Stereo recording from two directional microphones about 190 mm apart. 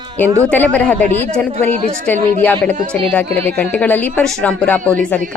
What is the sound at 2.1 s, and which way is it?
A woman's voice, 10° left (ahead or behind).